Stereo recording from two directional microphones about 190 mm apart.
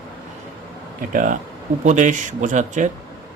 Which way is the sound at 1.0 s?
45° right (ahead or behind).